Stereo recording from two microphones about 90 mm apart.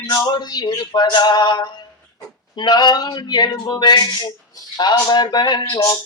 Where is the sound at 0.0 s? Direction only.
45° left (ahead or behind).